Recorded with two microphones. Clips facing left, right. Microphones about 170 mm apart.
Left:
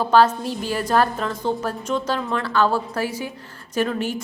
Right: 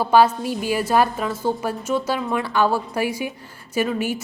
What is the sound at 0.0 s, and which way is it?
A woman's voice, 10° right (ahead or behind).